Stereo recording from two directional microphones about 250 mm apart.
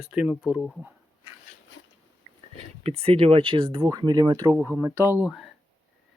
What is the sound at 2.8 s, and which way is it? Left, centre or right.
Speech, right.